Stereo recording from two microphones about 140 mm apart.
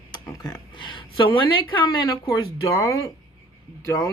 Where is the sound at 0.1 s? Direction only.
30° left (ahead or behind).